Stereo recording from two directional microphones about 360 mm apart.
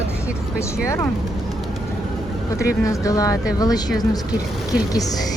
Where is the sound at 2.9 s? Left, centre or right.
Centre.